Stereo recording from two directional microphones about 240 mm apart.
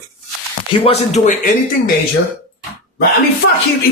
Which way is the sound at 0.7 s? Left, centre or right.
Left.